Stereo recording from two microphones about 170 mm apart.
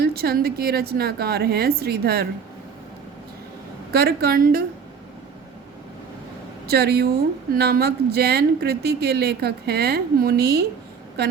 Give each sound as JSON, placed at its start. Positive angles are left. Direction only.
{"t": 0.0, "sound": "speech", "side_deg": -65}
{"t": 3.9, "sound": "a woman's voice", "side_deg": -65}
{"t": 6.7, "sound": "speech", "side_deg": -70}